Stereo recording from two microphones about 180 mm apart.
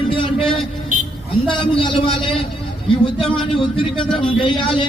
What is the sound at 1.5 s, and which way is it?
A man's voice, 30° left (ahead or behind).